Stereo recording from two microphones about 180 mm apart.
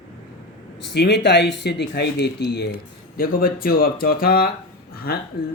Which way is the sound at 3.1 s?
55° left (ahead or behind).